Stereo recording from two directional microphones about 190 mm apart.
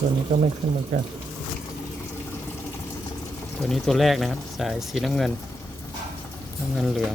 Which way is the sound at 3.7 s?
Centre (ahead or behind).